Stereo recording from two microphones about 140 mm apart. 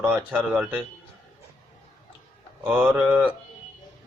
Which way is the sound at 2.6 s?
10° right (ahead or behind).